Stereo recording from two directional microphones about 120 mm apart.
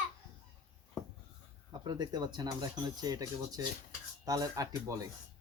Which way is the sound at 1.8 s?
35° right (ahead or behind).